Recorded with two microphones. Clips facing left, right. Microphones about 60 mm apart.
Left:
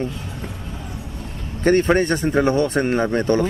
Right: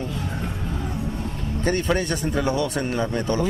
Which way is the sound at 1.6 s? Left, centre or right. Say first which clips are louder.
Left 7 dB; left.